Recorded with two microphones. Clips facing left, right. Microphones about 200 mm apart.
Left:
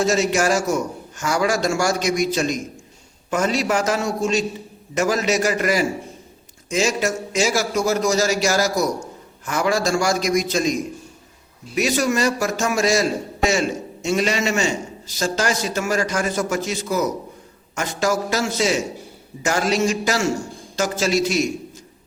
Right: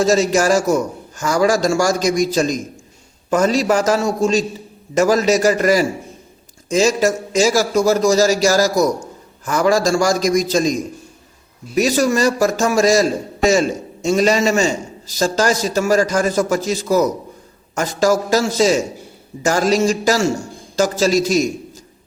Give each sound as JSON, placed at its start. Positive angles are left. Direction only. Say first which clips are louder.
{"t": 0.0, "sound": "a man's voice", "louder": "right 4 dB", "side_deg": -35}